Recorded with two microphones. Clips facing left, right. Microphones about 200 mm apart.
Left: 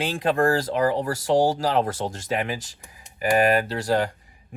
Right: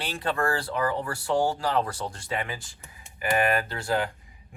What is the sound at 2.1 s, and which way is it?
Speech, 90° left.